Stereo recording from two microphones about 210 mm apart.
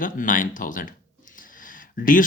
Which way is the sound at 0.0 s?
40° left (ahead or behind).